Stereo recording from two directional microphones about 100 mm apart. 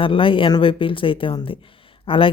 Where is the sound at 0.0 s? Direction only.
60° left (ahead or behind).